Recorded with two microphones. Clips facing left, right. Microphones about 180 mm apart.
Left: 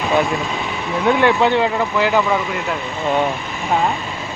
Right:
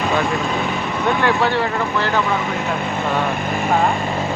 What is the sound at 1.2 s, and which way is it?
Speech, 20° left (ahead or behind).